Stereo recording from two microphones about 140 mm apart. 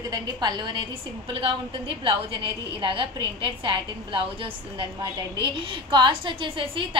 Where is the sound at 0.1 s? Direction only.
30° right (ahead or behind).